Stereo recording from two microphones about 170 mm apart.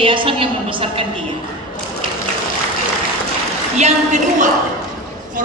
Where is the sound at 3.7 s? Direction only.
45° right (ahead or behind).